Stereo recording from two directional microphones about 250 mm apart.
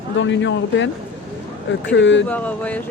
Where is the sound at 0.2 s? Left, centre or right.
Left.